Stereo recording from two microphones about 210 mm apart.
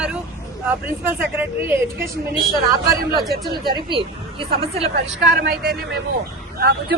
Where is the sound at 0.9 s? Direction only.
10° right (ahead or behind).